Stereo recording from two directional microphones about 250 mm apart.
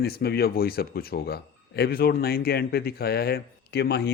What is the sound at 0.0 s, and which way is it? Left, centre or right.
A man's voice, left.